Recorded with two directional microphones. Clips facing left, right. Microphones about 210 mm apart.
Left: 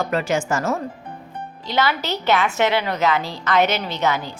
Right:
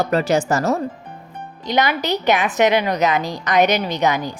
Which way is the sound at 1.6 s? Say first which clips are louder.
Right 3 dB; 15° right (ahead or behind).